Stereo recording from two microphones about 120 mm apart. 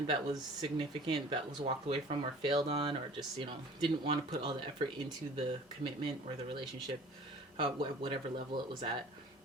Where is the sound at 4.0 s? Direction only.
45° right (ahead or behind).